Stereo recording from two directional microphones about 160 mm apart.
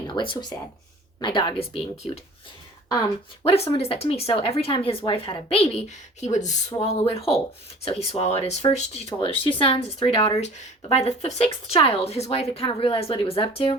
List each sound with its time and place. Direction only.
0.1 s speech: 30° left (ahead or behind)
3.4 s speech: 40° left (ahead or behind)
6.8 s speech: 40° left (ahead or behind)